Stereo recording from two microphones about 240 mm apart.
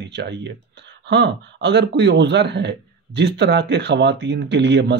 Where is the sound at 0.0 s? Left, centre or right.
Right.